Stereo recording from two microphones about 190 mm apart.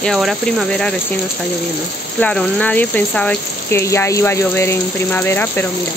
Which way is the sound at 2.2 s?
5° left (ahead or behind).